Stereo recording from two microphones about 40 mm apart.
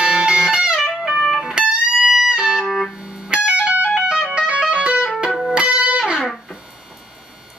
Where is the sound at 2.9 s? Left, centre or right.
Centre.